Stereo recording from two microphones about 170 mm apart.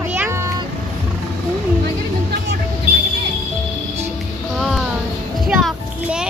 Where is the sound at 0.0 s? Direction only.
10° right (ahead or behind).